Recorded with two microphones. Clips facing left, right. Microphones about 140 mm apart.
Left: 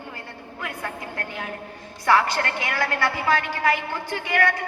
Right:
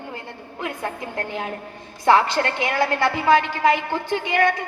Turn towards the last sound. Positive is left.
turn(degrees=-20)  # may be behind; listen again after turning